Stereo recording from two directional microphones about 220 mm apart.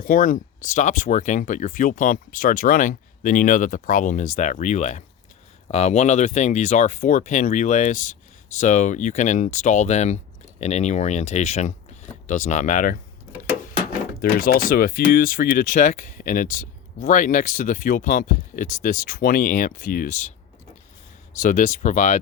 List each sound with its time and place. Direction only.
0.0 s speech: 35° left (ahead or behind)
14.2 s speech: 45° left (ahead or behind)
21.3 s speech: 35° left (ahead or behind)